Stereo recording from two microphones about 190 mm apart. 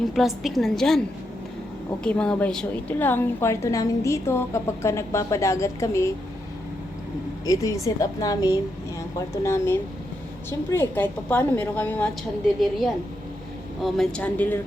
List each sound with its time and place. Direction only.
0.0 s a woman's voice: centre (ahead or behind)
2.0 s a woman's voice: 5° left (ahead or behind)
7.4 s a woman's voice: 20° left (ahead or behind)
13.8 s a woman's voice: centre (ahead or behind)